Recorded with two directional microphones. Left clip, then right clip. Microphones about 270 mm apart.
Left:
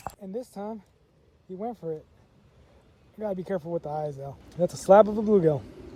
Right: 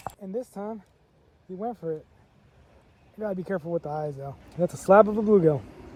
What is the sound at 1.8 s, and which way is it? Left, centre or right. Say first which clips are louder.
Speech: right 2 dB; right.